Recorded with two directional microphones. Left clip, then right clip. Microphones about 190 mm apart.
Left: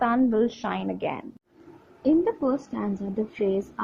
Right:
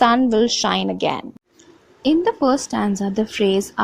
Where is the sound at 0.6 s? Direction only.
55° right (ahead or behind).